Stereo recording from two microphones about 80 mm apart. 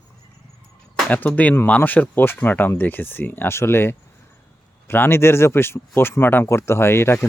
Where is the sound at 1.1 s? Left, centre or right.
Left.